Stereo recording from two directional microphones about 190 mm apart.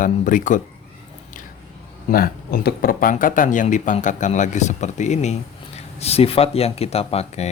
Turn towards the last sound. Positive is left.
turn(degrees=35)  # may be behind; listen again after turning